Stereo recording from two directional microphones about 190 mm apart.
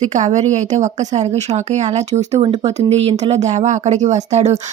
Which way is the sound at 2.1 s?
35° right (ahead or behind).